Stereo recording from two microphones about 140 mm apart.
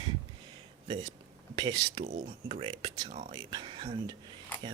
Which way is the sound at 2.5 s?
45° right (ahead or behind).